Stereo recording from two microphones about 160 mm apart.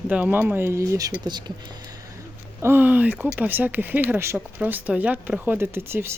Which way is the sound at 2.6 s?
10° right (ahead or behind).